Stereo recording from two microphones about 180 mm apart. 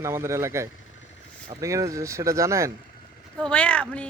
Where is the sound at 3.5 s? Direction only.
5° left (ahead or behind).